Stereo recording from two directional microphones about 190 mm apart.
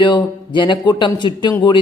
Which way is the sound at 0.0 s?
25° left (ahead or behind).